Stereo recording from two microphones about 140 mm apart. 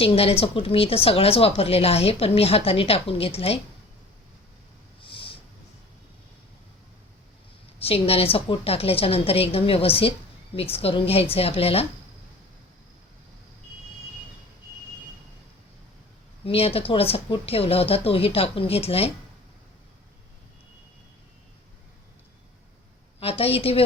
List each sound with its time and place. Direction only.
0.0 s speech: 45° left (ahead or behind)
5.0 s a sound: 40° left (ahead or behind)
7.8 s speech: 45° left (ahead or behind)
16.5 s speech: 45° left (ahead or behind)
23.2 s speech: 45° left (ahead or behind)